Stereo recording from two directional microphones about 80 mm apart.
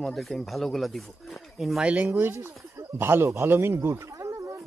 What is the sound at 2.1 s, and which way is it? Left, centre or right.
Speech, right.